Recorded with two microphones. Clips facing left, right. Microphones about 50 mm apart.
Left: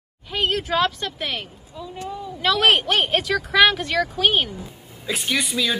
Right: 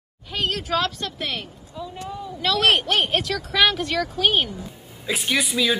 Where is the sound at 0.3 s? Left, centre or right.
Centre.